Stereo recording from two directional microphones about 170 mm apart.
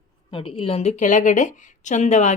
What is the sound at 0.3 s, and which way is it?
A woman's voice, 30° left (ahead or behind).